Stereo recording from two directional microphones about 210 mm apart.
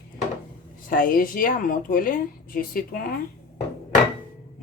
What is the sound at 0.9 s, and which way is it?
A woman's voice, 40° left (ahead or behind).